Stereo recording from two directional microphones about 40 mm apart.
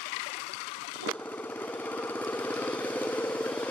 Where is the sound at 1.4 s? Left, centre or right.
Left.